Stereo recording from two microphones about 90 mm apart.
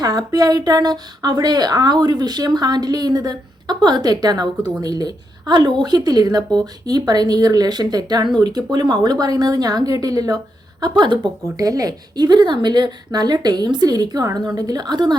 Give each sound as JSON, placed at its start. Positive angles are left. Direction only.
{"t": 0.0, "sound": "speech", "side_deg": -45}
{"t": 11.5, "sound": "speech", "side_deg": -40}